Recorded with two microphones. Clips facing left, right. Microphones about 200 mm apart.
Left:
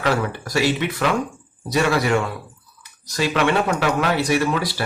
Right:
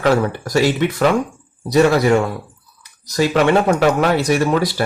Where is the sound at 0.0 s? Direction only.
45° right (ahead or behind).